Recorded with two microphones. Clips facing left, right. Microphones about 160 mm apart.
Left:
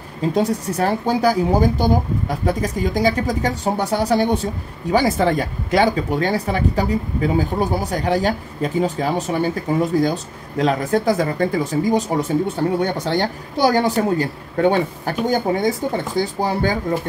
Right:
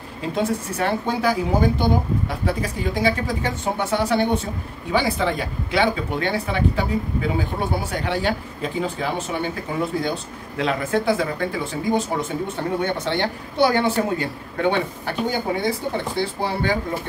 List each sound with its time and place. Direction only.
0.3 s speech: 40° left (ahead or behind)